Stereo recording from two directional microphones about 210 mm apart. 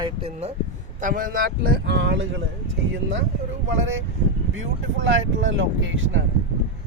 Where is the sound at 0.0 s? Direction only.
25° right (ahead or behind).